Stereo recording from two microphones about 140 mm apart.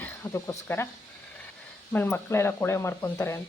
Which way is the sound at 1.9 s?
15° left (ahead or behind).